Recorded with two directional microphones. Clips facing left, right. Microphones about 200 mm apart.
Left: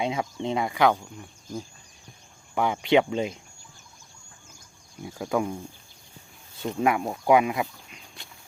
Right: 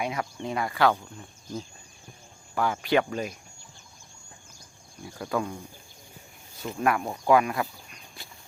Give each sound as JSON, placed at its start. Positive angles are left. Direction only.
{"t": 0.0, "sound": "speech", "side_deg": 20}
{"t": 5.1, "sound": "speech", "side_deg": 15}
{"t": 6.8, "sound": "speech", "side_deg": 20}
{"t": 8.2, "sound": "horse", "side_deg": -5}